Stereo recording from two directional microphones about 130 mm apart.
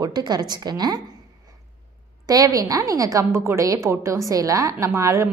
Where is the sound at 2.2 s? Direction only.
25° right (ahead or behind).